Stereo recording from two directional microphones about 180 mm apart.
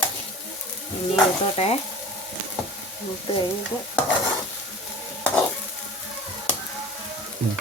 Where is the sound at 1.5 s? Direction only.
35° left (ahead or behind).